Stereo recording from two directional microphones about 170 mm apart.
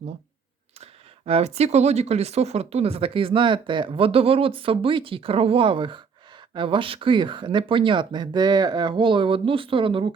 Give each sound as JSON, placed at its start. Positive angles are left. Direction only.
{"t": 0.8, "sound": "speech", "side_deg": -35}